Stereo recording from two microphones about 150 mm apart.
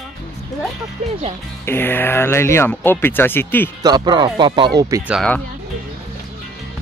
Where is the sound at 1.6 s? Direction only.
15° left (ahead or behind).